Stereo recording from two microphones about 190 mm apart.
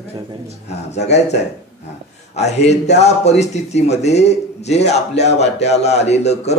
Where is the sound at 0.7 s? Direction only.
35° left (ahead or behind).